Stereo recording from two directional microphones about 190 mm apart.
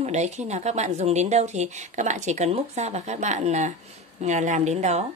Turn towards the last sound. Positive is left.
turn(degrees=-35)  # may be behind; listen again after turning